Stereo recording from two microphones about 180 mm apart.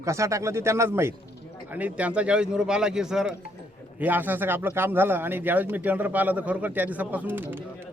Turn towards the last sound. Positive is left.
turn(degrees=-10)  # may be behind; listen again after turning